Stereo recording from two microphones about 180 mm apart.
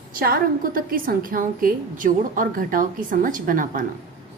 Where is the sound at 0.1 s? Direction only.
50° right (ahead or behind).